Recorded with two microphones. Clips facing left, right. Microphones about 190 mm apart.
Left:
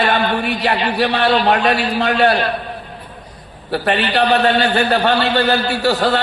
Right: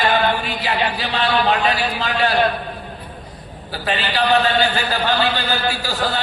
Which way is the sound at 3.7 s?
65° left (ahead or behind).